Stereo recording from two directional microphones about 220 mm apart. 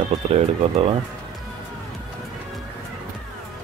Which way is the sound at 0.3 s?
25° right (ahead or behind).